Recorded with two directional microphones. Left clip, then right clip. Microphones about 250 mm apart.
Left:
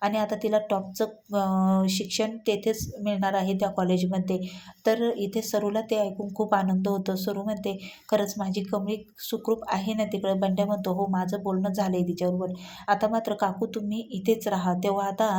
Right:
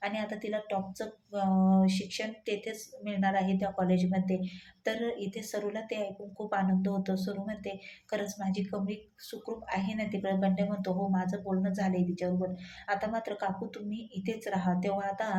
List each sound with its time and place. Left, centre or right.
0.0 s speech: left